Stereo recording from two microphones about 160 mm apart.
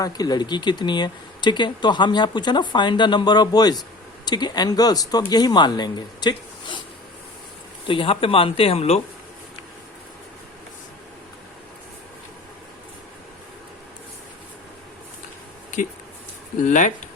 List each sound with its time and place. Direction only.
0.0 s speech: 25° left (ahead or behind)
7.9 s speech: 35° left (ahead or behind)
16.6 s speech: 50° left (ahead or behind)